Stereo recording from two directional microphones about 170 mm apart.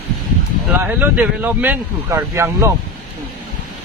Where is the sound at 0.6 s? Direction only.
10° right (ahead or behind).